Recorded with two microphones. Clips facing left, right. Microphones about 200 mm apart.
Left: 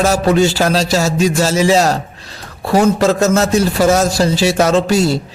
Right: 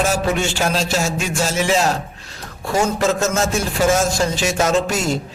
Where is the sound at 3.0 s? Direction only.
35° left (ahead or behind).